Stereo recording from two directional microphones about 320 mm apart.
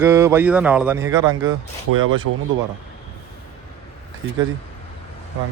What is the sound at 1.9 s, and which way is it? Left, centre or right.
Speech, right.